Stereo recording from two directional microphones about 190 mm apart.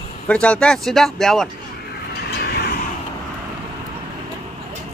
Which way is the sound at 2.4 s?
55° left (ahead or behind).